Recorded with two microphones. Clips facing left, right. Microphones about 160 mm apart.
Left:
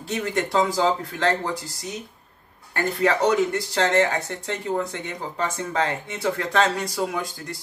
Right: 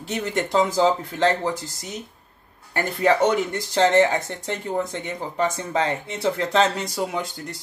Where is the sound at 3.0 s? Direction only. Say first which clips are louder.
Right 1 dB; 20° right (ahead or behind).